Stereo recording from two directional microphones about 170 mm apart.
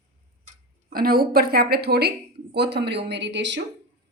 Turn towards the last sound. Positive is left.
turn(degrees=-90)